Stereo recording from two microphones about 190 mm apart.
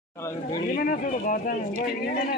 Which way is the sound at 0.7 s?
45° left (ahead or behind).